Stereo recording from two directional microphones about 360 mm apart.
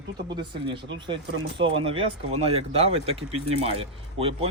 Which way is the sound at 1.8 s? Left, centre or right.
Centre.